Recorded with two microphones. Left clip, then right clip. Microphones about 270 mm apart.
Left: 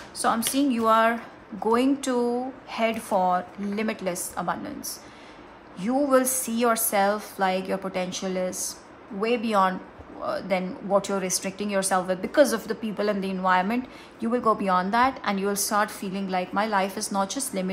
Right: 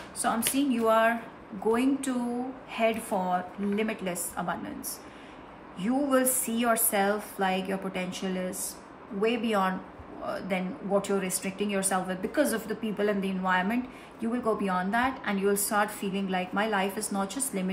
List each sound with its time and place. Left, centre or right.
0.2 s a woman's voice: centre
5.9 s a woman's voice: centre